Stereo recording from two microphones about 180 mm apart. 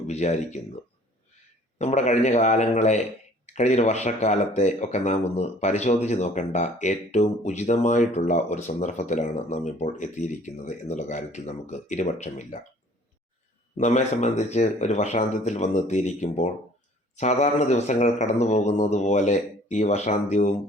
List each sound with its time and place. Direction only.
0.1 s speech: 40° left (ahead or behind)
1.8 s speech: 40° left (ahead or behind)
13.7 s speech: 40° left (ahead or behind)